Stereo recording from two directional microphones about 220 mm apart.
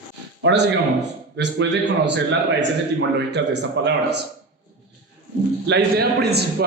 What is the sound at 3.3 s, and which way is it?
Speech, 50° right (ahead or behind).